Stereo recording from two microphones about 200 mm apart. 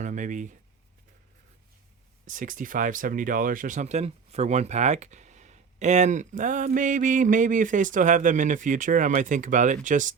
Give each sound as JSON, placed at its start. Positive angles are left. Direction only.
{"t": 0.0, "sound": "speech", "side_deg": -40}
{"t": 2.2, "sound": "speech", "side_deg": -40}